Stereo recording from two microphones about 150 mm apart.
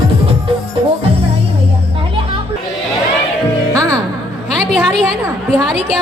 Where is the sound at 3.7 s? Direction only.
25° right (ahead or behind).